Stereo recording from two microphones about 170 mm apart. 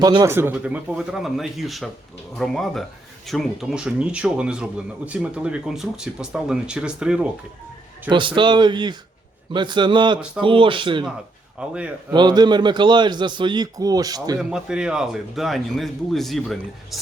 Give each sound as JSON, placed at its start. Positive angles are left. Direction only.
{"t": 0.0, "sound": "a man's voice", "side_deg": -25}
{"t": 0.3, "sound": "a man's voice", "side_deg": -10}
{"t": 8.4, "sound": "a man's voice", "side_deg": -25}
{"t": 11.6, "sound": "a man's voice", "side_deg": -5}
{"t": 12.1, "sound": "a man's voice", "side_deg": -25}
{"t": 14.3, "sound": "a man's voice", "side_deg": -5}